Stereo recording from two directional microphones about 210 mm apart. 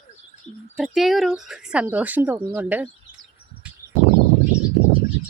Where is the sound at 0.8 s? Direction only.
Centre (ahead or behind).